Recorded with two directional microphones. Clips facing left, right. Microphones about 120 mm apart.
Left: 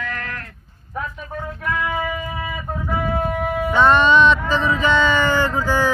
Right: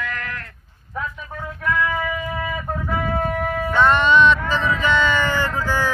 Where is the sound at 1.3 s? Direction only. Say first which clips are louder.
Right 2 dB; 20° left (ahead or behind).